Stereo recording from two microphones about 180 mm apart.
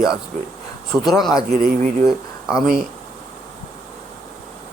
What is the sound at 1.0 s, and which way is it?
Speech, centre (ahead or behind).